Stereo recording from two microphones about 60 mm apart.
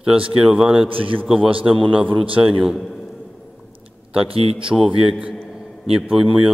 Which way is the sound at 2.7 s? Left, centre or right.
Centre.